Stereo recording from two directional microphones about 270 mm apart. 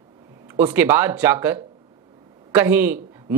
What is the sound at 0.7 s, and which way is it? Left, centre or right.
Speech, centre.